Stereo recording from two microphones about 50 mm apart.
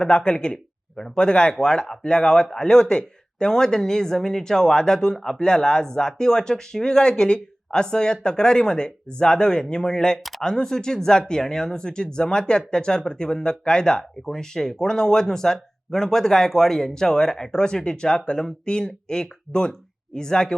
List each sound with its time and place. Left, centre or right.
0.0 s speech: centre